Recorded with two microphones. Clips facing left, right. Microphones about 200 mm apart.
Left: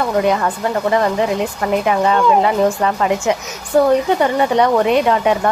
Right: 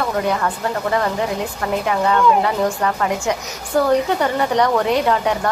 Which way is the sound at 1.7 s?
20° left (ahead or behind).